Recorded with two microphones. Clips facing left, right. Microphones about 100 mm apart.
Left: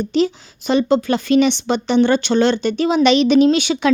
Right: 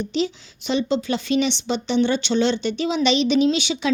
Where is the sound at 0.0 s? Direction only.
50° left (ahead or behind).